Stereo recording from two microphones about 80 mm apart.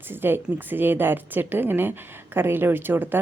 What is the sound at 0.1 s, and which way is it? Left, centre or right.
A woman's voice, right.